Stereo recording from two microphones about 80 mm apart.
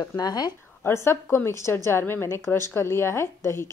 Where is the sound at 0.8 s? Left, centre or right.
Left.